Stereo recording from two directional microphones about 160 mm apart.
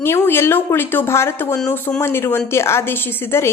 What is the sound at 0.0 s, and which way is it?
Speech, 15° left (ahead or behind).